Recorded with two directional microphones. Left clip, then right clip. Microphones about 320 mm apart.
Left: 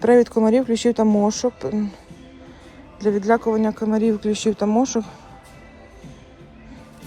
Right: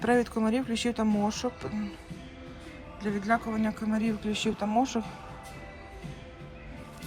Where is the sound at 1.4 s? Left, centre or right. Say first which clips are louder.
Left 11 dB; right.